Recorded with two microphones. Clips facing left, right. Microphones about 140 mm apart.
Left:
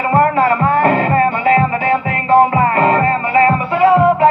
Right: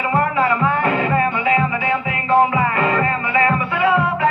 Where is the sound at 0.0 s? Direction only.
45° left (ahead or behind).